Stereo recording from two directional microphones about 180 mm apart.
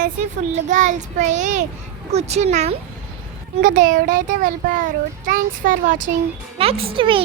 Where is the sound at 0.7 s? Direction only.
45° right (ahead or behind).